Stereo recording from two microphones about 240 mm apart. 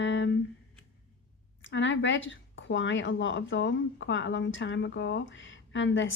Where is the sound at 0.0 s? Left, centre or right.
Left.